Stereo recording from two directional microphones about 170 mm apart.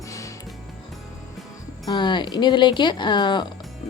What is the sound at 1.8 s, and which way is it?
A woman's voice, 25° left (ahead or behind).